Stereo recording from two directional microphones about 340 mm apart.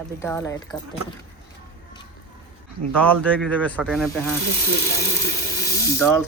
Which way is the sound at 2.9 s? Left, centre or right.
Centre.